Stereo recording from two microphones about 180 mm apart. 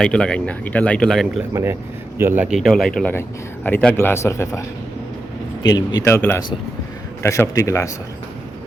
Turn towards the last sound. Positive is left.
turn(degrees=15)  # may be behind; listen again after turning